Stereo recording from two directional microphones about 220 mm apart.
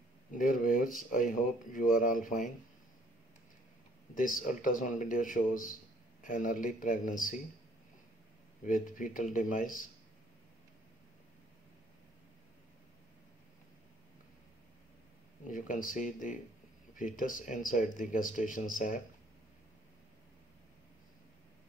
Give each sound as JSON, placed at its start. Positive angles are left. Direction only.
{"t": 0.3, "sound": "speech", "side_deg": 40}
{"t": 4.1, "sound": "speech", "side_deg": 40}
{"t": 8.6, "sound": "speech", "side_deg": 35}
{"t": 15.4, "sound": "speech", "side_deg": 35}